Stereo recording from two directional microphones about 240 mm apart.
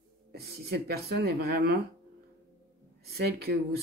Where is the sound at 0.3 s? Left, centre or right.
Right.